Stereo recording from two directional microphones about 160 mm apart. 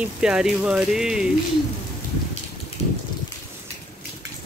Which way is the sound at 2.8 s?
40° left (ahead or behind).